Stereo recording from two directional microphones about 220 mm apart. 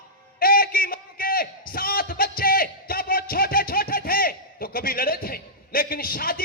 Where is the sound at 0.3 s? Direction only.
40° left (ahead or behind).